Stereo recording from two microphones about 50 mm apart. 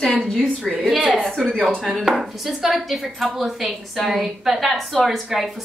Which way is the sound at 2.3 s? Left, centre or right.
Centre.